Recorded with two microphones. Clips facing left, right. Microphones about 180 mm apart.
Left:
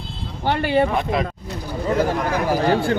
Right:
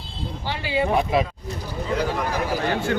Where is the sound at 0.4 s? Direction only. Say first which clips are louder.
Left 7 dB; 60° left (ahead or behind).